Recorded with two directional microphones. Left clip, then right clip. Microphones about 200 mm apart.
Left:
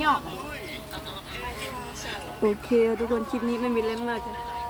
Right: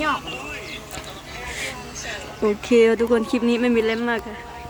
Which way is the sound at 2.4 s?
15° right (ahead or behind).